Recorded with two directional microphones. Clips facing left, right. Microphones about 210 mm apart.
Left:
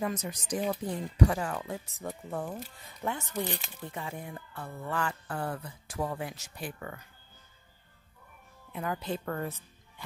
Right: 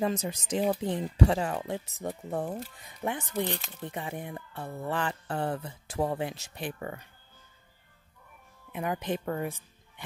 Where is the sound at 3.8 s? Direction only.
20° right (ahead or behind).